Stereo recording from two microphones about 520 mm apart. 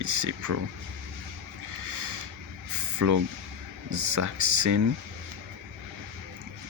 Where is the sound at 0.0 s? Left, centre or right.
Right.